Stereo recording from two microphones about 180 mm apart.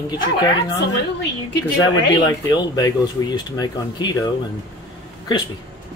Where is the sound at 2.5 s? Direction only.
20° left (ahead or behind).